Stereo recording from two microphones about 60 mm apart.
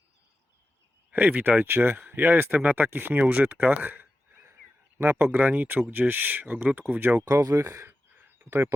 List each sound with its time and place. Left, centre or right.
1.1 s speech: right
3.8 s a sound: right
4.9 s speech: right
7.3 s speech: right
7.9 s a sound: right
8.4 s speech: right